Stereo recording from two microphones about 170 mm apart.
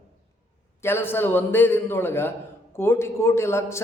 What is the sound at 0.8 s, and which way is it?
A man's voice, 15° left (ahead or behind).